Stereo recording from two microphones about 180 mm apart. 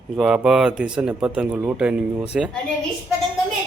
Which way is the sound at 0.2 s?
5° right (ahead or behind).